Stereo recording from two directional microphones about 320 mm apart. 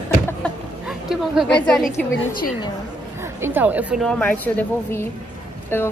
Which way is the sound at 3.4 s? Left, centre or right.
Centre.